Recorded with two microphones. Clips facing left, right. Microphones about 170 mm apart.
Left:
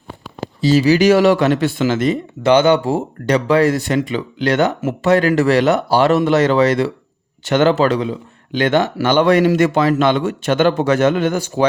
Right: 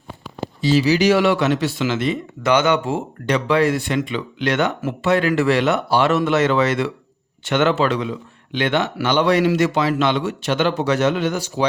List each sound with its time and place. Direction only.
0.6 s speech: 45° left (ahead or behind)
2.4 s speech: 30° left (ahead or behind); by 11.6 s 50° left (ahead or behind)